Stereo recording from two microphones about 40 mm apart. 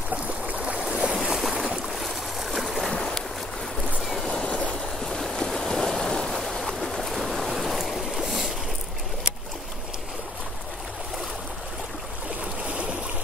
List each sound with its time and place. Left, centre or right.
0.1 s a sound: right
0.8 s boat: centre
1.3 s boat: centre
2.0 s stream: centre
2.9 s boat: centre
4.3 s a sound: centre
5.0 s stream: centre
7.8 s boat: centre
12.6 s stream: right